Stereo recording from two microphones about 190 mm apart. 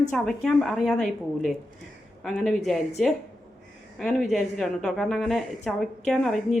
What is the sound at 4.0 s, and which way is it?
Speech, centre (ahead or behind).